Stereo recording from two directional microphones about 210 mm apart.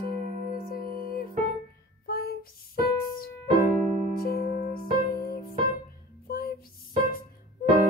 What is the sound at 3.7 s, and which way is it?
Music, 40° right (ahead or behind).